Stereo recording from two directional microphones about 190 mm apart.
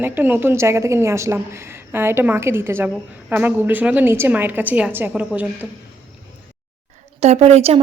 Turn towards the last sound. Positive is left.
turn(degrees=-35)  # may be behind; listen again after turning